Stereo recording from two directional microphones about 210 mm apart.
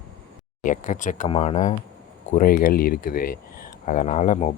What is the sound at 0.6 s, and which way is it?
Speech, 40° left (ahead or behind).